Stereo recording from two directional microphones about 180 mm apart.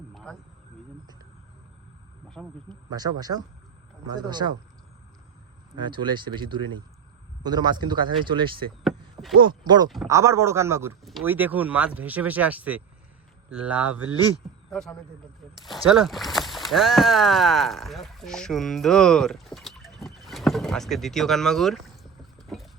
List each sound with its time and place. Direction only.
0.1 s a sound: centre (ahead or behind)
2.6 s speech: 20° right (ahead or behind)
5.7 s speech: 25° right (ahead or behind)
8.8 s a sound: centre (ahead or behind)
9.4 s speech: 25° right (ahead or behind); by 14.4 s 10° right (ahead or behind)
14.7 s speech: 5° left (ahead or behind)